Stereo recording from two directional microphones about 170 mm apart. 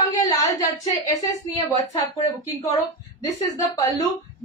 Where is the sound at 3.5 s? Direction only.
20° left (ahead or behind).